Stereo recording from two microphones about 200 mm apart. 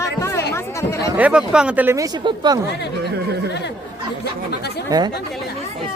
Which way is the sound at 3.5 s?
60° left (ahead or behind).